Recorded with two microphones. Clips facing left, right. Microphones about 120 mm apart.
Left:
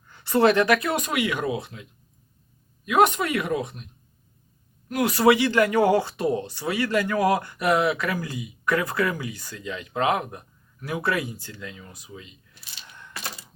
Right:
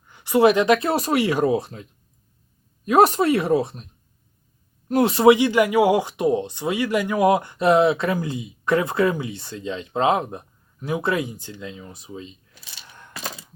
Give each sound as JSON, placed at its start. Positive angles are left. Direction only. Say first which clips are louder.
{"t": 0.1, "sound": "speech", "louder": "right 3 dB", "side_deg": -15}
{"t": 4.9, "sound": "speech", "louder": "right 4 dB", "side_deg": -30}